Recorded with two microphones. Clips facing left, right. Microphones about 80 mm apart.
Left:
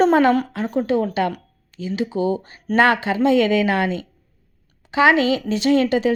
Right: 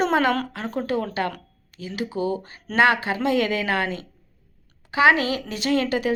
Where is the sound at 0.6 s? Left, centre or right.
Left.